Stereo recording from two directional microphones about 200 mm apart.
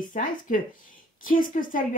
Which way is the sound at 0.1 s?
40° left (ahead or behind).